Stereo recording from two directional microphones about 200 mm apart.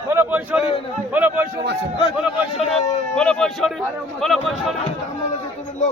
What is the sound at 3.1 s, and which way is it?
Speech, 5° left (ahead or behind).